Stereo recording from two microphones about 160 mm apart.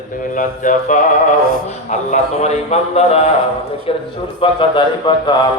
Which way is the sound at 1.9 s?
45° left (ahead or behind).